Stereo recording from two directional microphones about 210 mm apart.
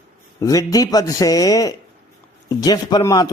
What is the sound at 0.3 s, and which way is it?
Speech, 15° left (ahead or behind).